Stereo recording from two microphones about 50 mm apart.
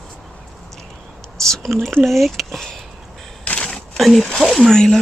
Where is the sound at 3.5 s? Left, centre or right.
Centre.